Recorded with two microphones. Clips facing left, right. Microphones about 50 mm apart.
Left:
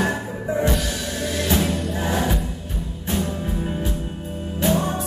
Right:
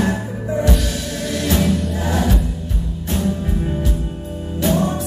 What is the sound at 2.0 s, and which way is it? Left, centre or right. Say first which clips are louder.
Music: right 1 dB; centre.